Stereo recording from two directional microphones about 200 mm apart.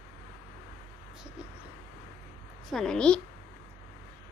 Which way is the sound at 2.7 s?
Centre (ahead or behind).